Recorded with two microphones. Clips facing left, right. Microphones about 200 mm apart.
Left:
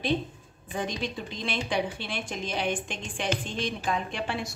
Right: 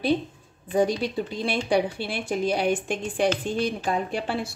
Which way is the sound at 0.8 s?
10° right (ahead or behind).